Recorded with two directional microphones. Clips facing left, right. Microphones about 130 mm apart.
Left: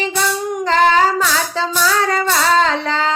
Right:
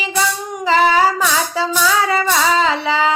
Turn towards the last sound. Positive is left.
turn(degrees=-5)  # may be behind; listen again after turning